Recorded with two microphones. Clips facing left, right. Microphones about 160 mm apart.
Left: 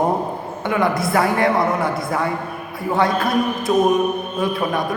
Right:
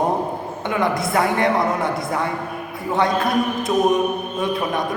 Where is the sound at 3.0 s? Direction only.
20° right (ahead or behind).